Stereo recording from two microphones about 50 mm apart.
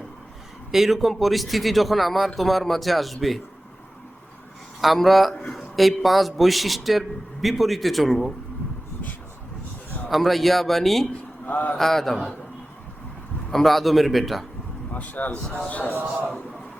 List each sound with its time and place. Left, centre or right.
0.7 s speech: centre
4.8 s speech: centre
5.3 s a man's voice: centre
5.5 s speech: centre
10.1 s speech: centre
11.4 s speech: left
11.8 s a man's voice: centre
13.5 s speech: centre
14.9 s speech: left